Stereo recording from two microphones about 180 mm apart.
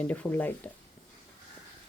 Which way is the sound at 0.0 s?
10° left (ahead or behind).